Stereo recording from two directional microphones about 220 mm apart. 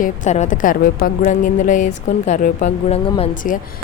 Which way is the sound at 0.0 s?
35° left (ahead or behind).